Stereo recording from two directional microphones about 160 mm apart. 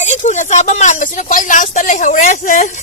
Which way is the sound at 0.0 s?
45° left (ahead or behind).